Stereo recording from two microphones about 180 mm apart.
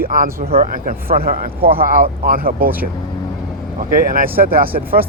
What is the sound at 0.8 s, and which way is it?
A man's voice, 55° right (ahead or behind).